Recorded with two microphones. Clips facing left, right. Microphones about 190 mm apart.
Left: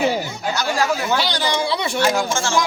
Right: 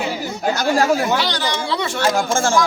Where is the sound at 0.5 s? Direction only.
50° right (ahead or behind).